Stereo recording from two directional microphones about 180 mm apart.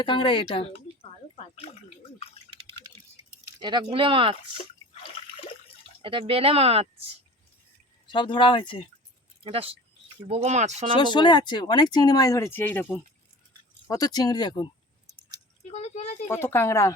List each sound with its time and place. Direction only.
0.0 s speech: 25° left (ahead or behind)
2.5 s typing: 30° right (ahead or behind)
3.6 s speech: 25° right (ahead or behind)
6.0 s speech: 30° right (ahead or behind)
8.0 s speech: 25° left (ahead or behind)
9.4 s speech: 30° right (ahead or behind)
11.0 s speech: 25° left (ahead or behind)
15.6 s a sound: 35° left (ahead or behind)
16.3 s speech: 15° left (ahead or behind)